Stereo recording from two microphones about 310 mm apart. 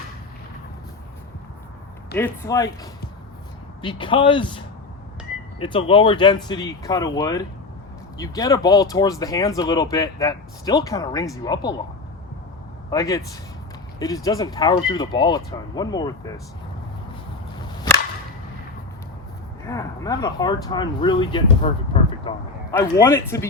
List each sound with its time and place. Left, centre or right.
2.1 s speech: centre
3.8 s speech: centre
12.9 s speech: centre
19.6 s speech: centre
21.6 s a sound: centre
22.7 s speech: centre